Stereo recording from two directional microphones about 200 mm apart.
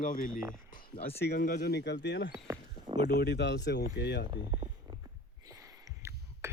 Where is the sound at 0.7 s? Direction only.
25° left (ahead or behind).